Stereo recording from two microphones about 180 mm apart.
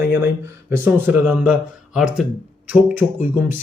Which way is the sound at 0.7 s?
10° right (ahead or behind).